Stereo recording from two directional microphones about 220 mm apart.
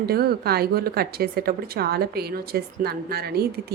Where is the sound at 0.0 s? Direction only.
45° right (ahead or behind).